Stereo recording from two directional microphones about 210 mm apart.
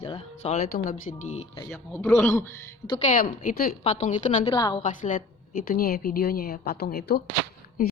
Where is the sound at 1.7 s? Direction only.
10° left (ahead or behind).